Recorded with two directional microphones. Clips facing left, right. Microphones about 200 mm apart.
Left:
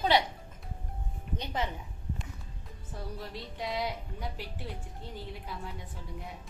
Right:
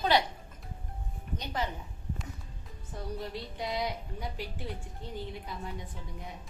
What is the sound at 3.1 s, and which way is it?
Speech, centre (ahead or behind).